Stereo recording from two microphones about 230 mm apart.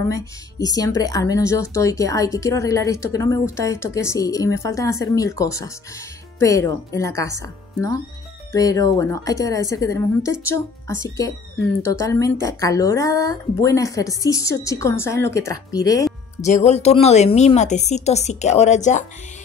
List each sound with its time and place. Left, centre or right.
0.1 s speech: centre
8.5 s speech: centre
11.8 s speech: centre
16.4 s a woman's voice: left